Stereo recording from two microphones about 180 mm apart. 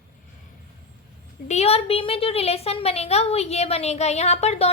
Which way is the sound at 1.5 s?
35° left (ahead or behind).